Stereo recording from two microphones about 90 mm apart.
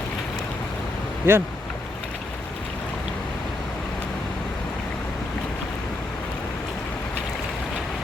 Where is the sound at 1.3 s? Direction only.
25° right (ahead or behind).